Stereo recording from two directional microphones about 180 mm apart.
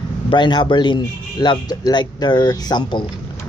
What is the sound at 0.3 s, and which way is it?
A man's voice, 25° left (ahead or behind).